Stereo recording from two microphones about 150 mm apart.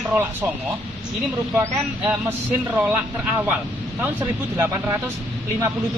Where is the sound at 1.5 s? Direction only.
15° right (ahead or behind).